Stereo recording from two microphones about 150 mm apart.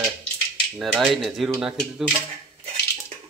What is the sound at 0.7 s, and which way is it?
A man's voice, 5° right (ahead or behind).